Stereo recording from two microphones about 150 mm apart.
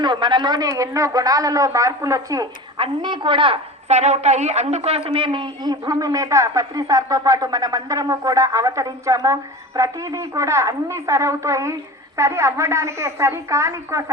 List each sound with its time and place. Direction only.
0.0 s a woman's voice: 30° right (ahead or behind)
2.7 s a woman's voice: 35° right (ahead or behind)